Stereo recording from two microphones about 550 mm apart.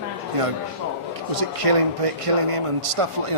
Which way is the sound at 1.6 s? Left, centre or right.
Right.